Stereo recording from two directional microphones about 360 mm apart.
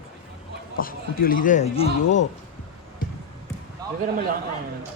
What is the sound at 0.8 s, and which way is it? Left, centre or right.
A man's voice, left.